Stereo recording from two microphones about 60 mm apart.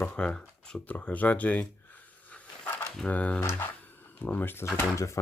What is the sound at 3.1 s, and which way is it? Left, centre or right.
Speech, left.